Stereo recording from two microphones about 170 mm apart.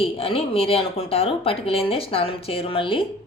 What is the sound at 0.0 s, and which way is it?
Speech, 35° left (ahead or behind).